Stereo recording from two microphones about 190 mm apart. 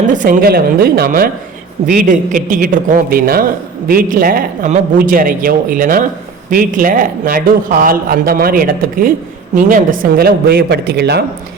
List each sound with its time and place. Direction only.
0.1 s speech: 45° right (ahead or behind)